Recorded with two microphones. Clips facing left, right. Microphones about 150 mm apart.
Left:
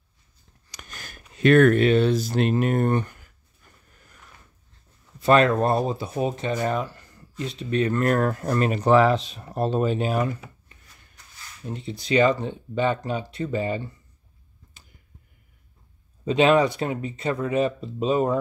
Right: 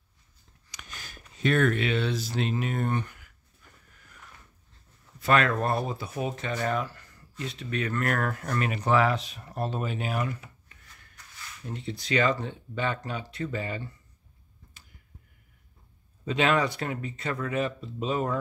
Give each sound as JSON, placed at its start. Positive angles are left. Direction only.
{"t": 0.7, "sound": "a sound", "side_deg": 45}
{"t": 1.8, "sound": "speech", "side_deg": 45}
{"t": 5.2, "sound": "speech", "side_deg": 30}
{"t": 11.6, "sound": "speech", "side_deg": 20}
{"t": 16.3, "sound": "speech", "side_deg": 20}